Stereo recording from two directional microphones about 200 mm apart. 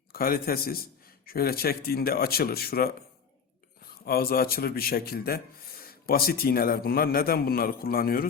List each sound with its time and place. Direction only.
0.1 s a man's voice: 50° left (ahead or behind)
4.0 s a man's voice: 50° left (ahead or behind)